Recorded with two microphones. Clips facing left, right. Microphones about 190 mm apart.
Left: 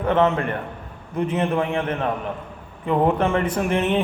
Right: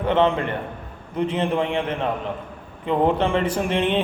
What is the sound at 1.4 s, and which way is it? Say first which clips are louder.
A man's voice: left 1 dB; 25° right (ahead or behind).